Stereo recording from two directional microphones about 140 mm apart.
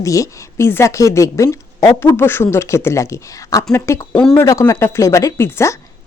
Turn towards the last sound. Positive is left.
turn(degrees=20)  # may be behind; listen again after turning